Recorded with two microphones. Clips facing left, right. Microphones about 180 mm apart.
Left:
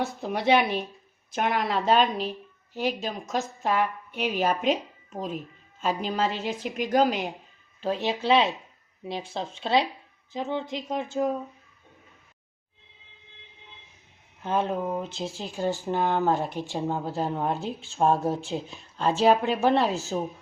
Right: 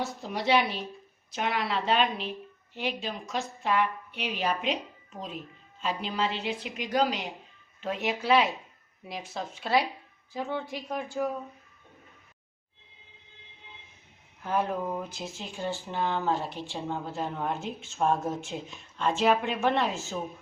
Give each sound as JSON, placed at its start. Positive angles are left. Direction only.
{"t": 0.0, "sound": "a woman's voice", "side_deg": 55}
{"t": 5.8, "sound": "a woman's voice", "side_deg": 45}
{"t": 7.8, "sound": "speech", "side_deg": 30}
{"t": 14.4, "sound": "speech", "side_deg": 25}